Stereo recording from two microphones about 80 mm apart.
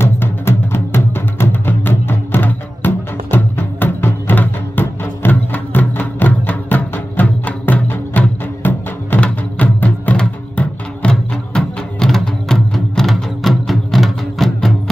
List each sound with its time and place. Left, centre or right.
0.0 s music: left; by 14.7 s centre